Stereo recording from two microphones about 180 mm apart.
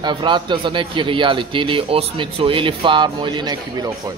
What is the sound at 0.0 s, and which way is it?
A man's voice, 25° right (ahead or behind).